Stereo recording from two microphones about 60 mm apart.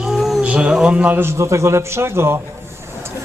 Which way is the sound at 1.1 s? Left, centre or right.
Right.